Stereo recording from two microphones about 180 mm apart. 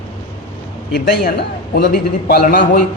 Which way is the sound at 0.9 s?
65° left (ahead or behind).